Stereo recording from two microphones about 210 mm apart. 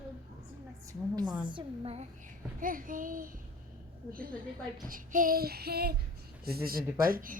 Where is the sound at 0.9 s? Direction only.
20° right (ahead or behind); by 3.4 s 40° right (ahead or behind).